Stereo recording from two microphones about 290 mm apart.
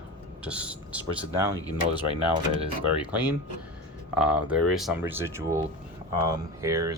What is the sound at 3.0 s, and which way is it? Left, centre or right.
Speech, centre.